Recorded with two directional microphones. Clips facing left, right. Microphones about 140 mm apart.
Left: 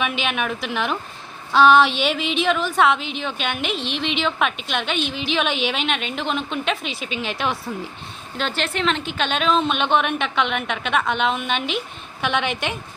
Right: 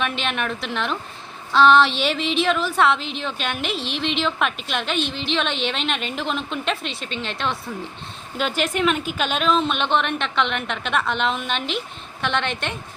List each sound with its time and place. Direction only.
0.0 s a woman's voice: 5° left (ahead or behind)
8.4 s a woman's voice: 10° right (ahead or behind)